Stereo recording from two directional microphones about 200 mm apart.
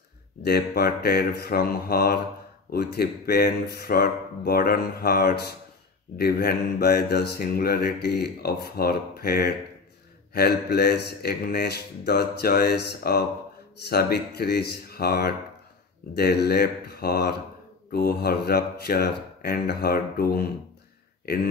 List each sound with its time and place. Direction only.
0.4 s speech: 50° left (ahead or behind)